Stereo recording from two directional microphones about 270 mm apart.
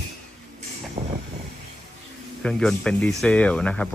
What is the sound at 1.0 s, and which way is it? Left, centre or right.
Vehicle, right.